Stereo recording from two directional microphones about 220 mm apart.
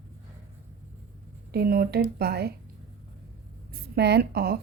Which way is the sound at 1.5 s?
45° right (ahead or behind).